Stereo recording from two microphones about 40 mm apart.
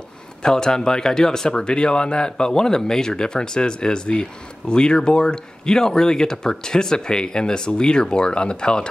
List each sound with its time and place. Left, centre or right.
0.4 s speech: centre